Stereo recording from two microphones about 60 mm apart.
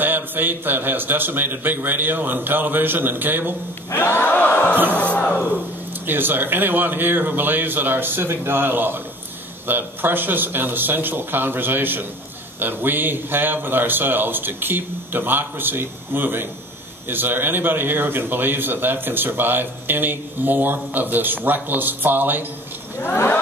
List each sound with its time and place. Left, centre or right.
0.0 s a man's voice: right
3.9 s a sound: left
5.1 s speech: left
6.0 s a man's voice: right